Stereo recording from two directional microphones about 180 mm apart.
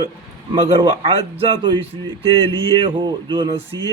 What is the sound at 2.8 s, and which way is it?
Speech, 25° right (ahead or behind).